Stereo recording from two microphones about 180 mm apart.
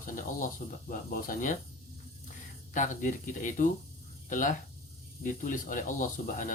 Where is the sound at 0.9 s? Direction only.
50° left (ahead or behind).